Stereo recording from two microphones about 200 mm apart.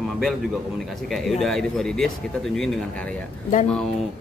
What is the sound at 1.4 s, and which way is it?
A man's voice, centre (ahead or behind).